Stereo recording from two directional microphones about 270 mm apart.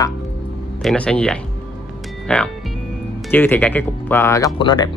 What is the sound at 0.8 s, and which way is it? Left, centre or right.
Speech, centre.